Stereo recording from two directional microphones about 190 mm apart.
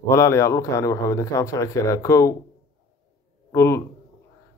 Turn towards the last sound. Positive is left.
turn(degrees=15)  # may be behind; listen again after turning